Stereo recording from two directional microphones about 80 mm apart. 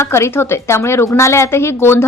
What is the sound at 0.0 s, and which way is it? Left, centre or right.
A woman's voice, left.